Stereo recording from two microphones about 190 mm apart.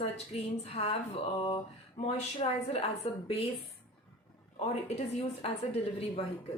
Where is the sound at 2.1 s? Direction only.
35° left (ahead or behind).